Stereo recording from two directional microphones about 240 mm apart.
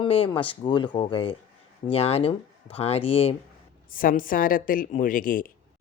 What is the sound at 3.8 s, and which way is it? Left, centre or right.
Speech, left.